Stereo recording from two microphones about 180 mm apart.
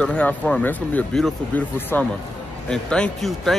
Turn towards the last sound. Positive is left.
turn(degrees=0)  # may be behind; listen again after turning